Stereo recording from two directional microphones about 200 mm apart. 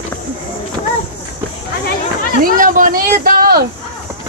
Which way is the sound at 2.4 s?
40° right (ahead or behind).